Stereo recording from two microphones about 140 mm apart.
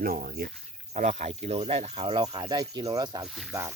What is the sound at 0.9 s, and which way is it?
Speech, 55° right (ahead or behind).